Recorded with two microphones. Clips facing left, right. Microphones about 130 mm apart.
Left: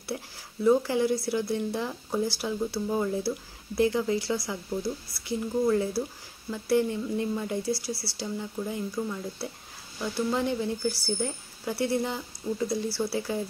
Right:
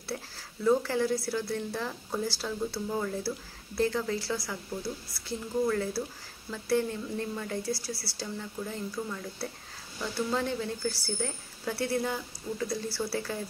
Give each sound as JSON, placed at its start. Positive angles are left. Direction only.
{"t": 0.7, "sound": "a woman's voice", "side_deg": 15}